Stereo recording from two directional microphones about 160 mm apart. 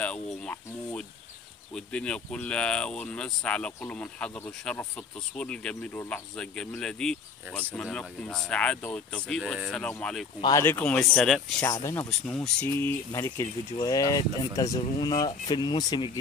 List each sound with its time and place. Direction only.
0.0 s speech: 5° left (ahead or behind)
10.4 s speech: 15° left (ahead or behind)
11.6 s speech: 15° left (ahead or behind)